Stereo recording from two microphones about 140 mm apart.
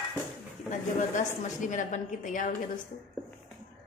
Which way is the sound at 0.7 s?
60° left (ahead or behind).